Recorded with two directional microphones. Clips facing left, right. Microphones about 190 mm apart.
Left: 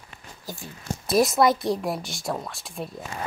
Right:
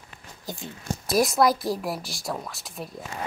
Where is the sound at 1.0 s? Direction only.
Centre (ahead or behind).